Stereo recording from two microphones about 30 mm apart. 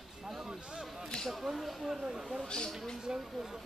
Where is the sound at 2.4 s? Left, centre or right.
Left.